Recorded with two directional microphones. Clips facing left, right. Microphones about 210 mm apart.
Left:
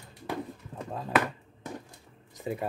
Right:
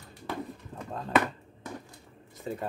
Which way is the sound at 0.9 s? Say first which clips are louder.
Right 1 dB; 5° left (ahead or behind).